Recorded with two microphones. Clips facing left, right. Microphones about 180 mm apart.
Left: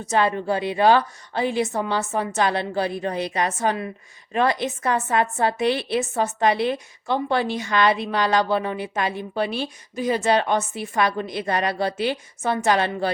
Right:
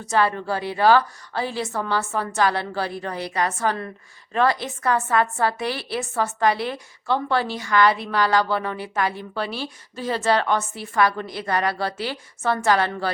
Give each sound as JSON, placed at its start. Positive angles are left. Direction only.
{"t": 0.1, "sound": "a woman's voice", "side_deg": 20}